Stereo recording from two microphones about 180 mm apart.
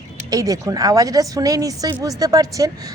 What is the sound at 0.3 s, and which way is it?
Speech, 20° right (ahead or behind).